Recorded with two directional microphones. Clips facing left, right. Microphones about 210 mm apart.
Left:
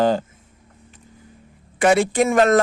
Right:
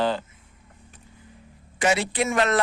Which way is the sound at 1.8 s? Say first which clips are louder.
Left 7 dB; 55° left (ahead or behind).